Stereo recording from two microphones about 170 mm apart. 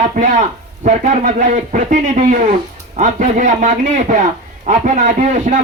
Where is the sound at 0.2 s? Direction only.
50° right (ahead or behind).